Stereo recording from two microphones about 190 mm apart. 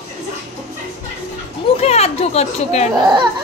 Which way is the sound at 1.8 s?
35° left (ahead or behind).